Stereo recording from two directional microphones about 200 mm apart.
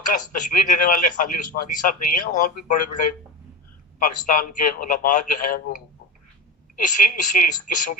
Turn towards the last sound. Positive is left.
turn(degrees=40)  # may be behind; listen again after turning